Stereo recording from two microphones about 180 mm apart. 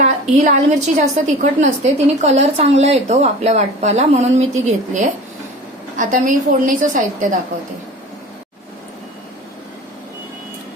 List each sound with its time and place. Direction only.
0.0 s a woman's voice: 40° right (ahead or behind)